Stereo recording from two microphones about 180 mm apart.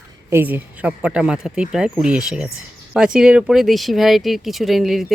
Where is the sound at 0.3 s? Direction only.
10° right (ahead or behind).